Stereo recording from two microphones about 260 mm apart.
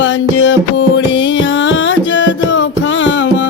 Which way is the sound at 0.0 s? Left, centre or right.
Left.